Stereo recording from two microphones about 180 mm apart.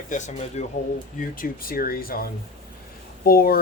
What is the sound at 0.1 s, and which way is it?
Speech, 40° left (ahead or behind).